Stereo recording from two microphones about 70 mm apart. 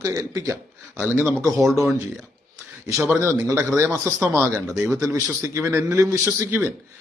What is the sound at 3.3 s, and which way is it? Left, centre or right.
Speech, right.